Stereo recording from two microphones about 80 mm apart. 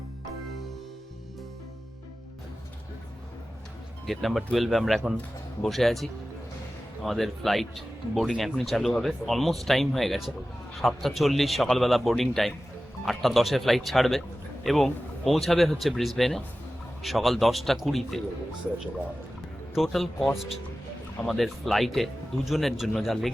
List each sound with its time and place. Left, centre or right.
4.0 s speech: centre
19.7 s speech: centre